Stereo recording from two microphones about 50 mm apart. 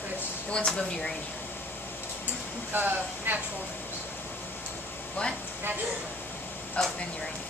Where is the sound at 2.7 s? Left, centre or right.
Right.